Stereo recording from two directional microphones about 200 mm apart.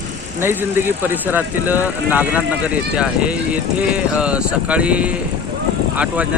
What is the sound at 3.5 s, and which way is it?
Speech, 5° right (ahead or behind).